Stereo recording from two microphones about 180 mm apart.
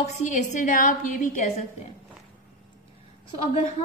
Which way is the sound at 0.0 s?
45° left (ahead or behind).